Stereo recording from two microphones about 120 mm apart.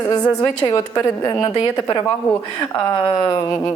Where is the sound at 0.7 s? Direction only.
30° left (ahead or behind).